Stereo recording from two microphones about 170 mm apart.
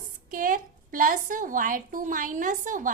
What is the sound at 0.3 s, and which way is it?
A woman's voice, 55° right (ahead or behind).